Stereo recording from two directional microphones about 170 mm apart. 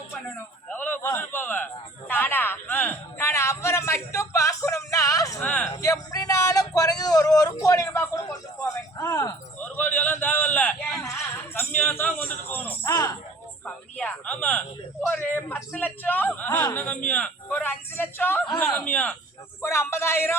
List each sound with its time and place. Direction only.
0.1 s a man's voice: 10° left (ahead or behind)
5.4 s speech: 10° left (ahead or behind)
5.7 s a sound: 20° left (ahead or behind)
12.5 s music: 10° left (ahead or behind)
12.9 s music: 20° left (ahead or behind)
13.7 s a sound: 5° left (ahead or behind)